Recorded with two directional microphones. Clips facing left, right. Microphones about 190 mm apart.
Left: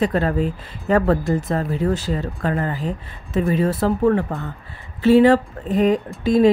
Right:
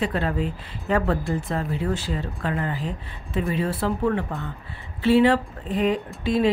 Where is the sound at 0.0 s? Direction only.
45° left (ahead or behind).